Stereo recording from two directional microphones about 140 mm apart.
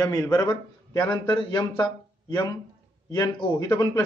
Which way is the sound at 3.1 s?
30° left (ahead or behind).